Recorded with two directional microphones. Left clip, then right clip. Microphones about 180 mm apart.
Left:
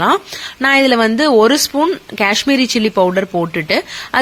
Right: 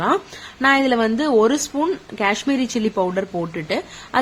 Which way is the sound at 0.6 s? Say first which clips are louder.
Left 5 dB; 15° left (ahead or behind).